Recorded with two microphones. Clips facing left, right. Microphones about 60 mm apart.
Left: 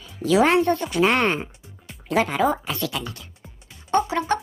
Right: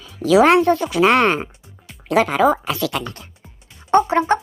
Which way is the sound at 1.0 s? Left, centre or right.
Right.